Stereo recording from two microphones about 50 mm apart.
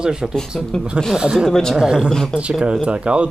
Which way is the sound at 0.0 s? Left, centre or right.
Centre.